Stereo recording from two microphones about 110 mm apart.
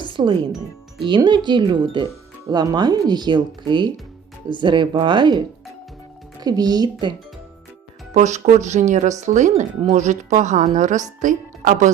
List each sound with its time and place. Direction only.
0.0 s speech: 50° right (ahead or behind)
6.4 s speech: 35° right (ahead or behind)
8.1 s a woman's voice: 90° right